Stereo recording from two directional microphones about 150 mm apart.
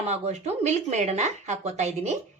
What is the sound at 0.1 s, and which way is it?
A woman's voice, 45° right (ahead or behind).